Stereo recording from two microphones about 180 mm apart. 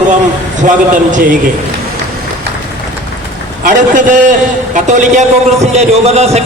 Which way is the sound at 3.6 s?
45° right (ahead or behind).